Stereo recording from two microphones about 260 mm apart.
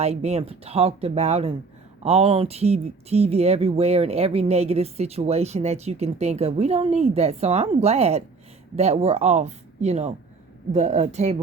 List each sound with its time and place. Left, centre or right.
0.0 s speech: right